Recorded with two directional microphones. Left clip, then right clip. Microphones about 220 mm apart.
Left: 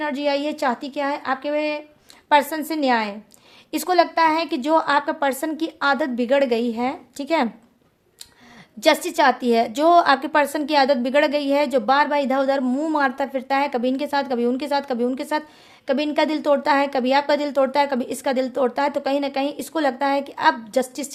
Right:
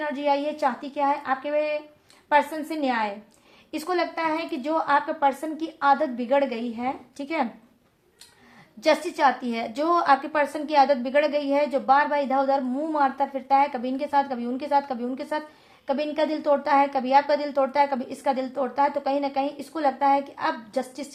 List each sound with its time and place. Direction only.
0.0 s a woman's voice: 45° left (ahead or behind)
8.8 s a woman's voice: 45° left (ahead or behind)